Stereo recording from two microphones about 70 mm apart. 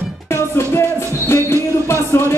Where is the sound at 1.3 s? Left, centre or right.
Left.